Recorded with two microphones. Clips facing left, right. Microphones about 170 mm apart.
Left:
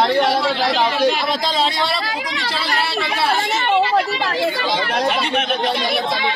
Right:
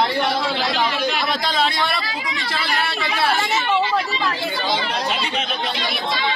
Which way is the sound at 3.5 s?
65° left (ahead or behind).